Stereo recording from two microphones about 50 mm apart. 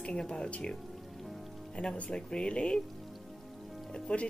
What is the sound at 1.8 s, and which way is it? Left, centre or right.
Speech, left.